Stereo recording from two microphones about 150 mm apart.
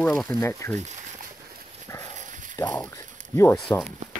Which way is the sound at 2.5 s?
25° left (ahead or behind).